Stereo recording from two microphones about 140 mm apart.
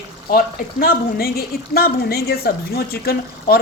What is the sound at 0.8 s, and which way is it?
A woman's voice, 90° left.